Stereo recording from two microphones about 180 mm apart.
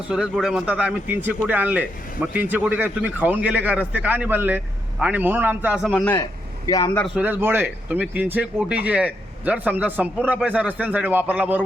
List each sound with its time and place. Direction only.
0.1 s speech: centre (ahead or behind)
5.9 s speech: 10° left (ahead or behind)
7.2 s speech: 10° right (ahead or behind)